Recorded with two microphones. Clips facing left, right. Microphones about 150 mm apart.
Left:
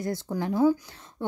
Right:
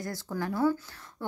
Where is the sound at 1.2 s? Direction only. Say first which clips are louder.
Left 5 dB; 20° left (ahead or behind).